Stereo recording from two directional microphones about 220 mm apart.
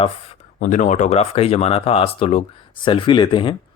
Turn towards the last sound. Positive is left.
turn(degrees=25)  # may be behind; listen again after turning